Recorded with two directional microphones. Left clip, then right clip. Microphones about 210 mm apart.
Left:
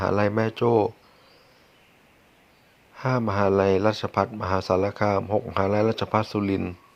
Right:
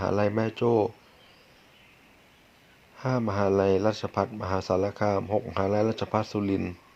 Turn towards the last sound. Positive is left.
turn(degrees=15)  # may be behind; listen again after turning